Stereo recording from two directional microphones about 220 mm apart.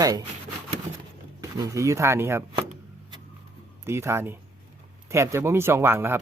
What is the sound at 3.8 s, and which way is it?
Speech, 10° right (ahead or behind).